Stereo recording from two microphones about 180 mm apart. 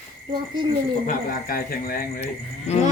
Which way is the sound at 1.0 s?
55° left (ahead or behind).